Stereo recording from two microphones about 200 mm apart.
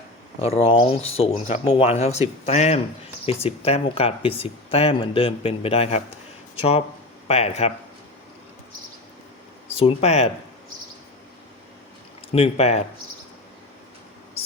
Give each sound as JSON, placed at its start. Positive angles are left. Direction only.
{"t": 0.4, "sound": "speech", "side_deg": 30}
{"t": 9.7, "sound": "speech", "side_deg": 30}
{"t": 12.3, "sound": "speech", "side_deg": 30}